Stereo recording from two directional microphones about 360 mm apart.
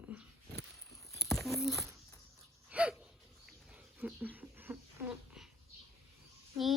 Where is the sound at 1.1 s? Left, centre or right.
Centre.